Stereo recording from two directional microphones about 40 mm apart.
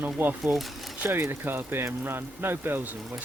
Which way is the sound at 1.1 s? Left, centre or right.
Right.